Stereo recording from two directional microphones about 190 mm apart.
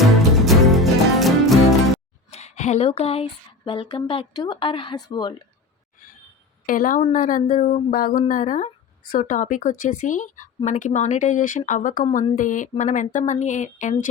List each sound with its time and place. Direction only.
0.3 s music: centre (ahead or behind)
2.3 s speech: 35° left (ahead or behind)
6.7 s speech: 45° left (ahead or behind)